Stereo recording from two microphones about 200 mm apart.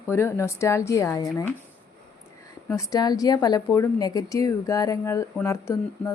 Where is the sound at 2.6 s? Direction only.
15° left (ahead or behind).